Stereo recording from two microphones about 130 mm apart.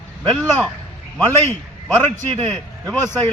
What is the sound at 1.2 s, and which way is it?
Speech, 20° left (ahead or behind).